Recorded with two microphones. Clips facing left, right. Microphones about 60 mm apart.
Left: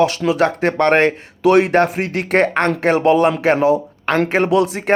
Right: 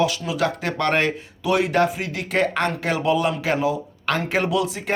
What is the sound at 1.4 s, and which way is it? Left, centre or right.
Speech, left.